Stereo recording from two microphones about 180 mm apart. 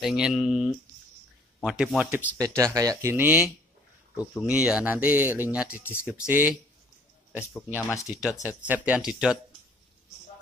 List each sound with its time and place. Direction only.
0.0 s speech: centre (ahead or behind)
2.1 s speech: 15° right (ahead or behind)